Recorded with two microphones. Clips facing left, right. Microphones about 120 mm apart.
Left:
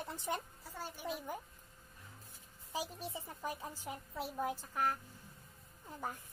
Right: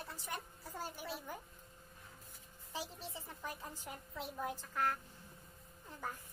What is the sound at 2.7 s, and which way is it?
Speech, 15° left (ahead or behind).